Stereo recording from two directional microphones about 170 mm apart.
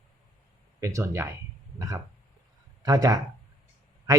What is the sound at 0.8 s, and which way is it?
Speech, 20° right (ahead or behind).